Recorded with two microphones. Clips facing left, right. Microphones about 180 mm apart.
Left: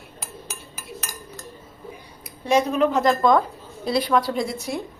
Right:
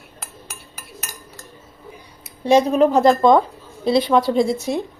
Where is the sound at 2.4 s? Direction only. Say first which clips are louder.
Right 5 dB; 30° right (ahead or behind).